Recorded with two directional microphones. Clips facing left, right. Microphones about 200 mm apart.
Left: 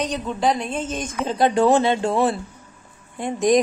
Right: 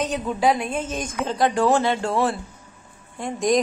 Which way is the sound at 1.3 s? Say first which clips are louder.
Left 3 dB; 25° left (ahead or behind).